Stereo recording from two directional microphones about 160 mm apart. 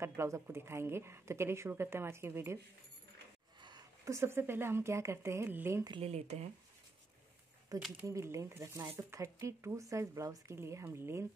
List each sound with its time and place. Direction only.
0.0 s speech: 15° right (ahead or behind)
3.6 s speech: 25° right (ahead or behind)
5.9 s speech: 40° right (ahead or behind)
8.0 s speech: 15° right (ahead or behind)